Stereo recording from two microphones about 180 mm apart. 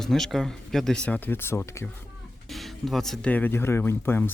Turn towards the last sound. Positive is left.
turn(degrees=10)  # may be behind; listen again after turning